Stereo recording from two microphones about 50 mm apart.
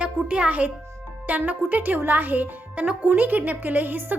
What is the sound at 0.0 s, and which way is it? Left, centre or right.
A child's voice, right.